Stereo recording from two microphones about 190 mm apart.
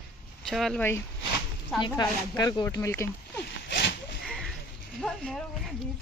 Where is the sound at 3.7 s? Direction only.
70° left (ahead or behind).